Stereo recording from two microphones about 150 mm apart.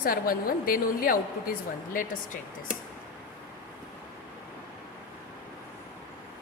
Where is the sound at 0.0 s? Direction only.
70° left (ahead or behind).